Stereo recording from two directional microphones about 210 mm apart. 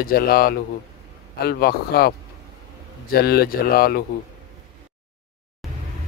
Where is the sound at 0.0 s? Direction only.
45° left (ahead or behind).